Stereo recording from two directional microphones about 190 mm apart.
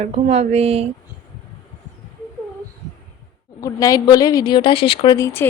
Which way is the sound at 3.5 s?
20° left (ahead or behind).